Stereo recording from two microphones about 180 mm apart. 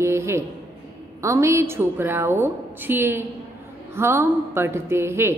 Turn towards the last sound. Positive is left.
turn(degrees=-15)  # may be behind; listen again after turning